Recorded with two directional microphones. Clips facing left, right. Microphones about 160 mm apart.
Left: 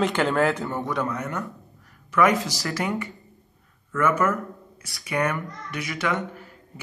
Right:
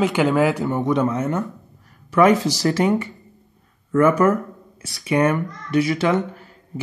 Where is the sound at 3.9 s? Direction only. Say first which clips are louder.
Right 7 dB; 35° right (ahead or behind).